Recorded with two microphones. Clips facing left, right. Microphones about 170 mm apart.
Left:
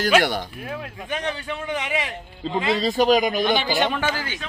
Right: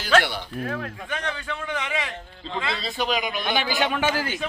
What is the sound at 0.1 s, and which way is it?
A man's voice, 10° left (ahead or behind).